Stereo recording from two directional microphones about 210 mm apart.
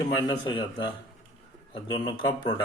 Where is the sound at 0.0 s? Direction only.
20° left (ahead or behind).